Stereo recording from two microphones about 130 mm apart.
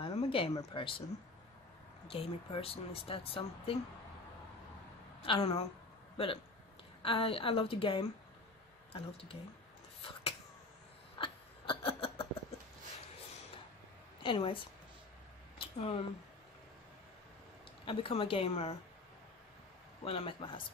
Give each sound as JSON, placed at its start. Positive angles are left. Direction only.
{"t": 0.0, "sound": "a sound", "side_deg": 45}
{"t": 0.7, "sound": "speech", "side_deg": 45}
{"t": 2.0, "sound": "speech", "side_deg": 45}
{"t": 5.2, "sound": "speech", "side_deg": 45}
{"t": 11.1, "sound": "a sound", "side_deg": 45}
{"t": 14.2, "sound": "a woman's voice", "side_deg": 40}
{"t": 15.6, "sound": "a sound", "side_deg": 45}
{"t": 17.8, "sound": "speech", "side_deg": 45}
{"t": 20.1, "sound": "speech", "side_deg": 45}